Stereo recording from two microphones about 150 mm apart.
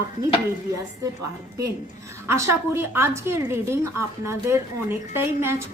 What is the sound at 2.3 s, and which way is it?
A woman's voice, 15° right (ahead or behind).